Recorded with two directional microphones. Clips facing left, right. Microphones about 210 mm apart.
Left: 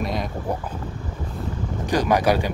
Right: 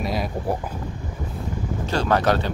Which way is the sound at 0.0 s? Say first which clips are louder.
Right 1 dB; 5° right (ahead or behind).